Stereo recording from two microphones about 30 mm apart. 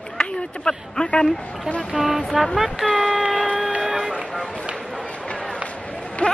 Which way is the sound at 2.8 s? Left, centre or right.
Right.